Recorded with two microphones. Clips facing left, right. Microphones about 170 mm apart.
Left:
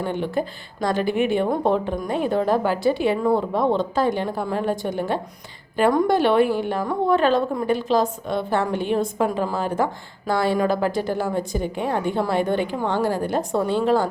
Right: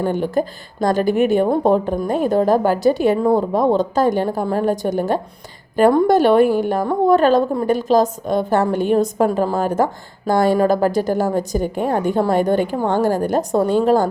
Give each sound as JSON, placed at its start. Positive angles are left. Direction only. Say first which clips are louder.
{"t": 0.0, "sound": "speech", "louder": "right 5 dB", "side_deg": -45}